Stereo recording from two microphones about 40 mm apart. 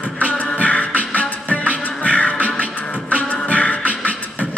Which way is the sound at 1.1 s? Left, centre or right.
Left.